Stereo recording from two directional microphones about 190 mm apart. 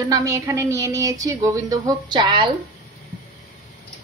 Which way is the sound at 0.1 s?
15° right (ahead or behind).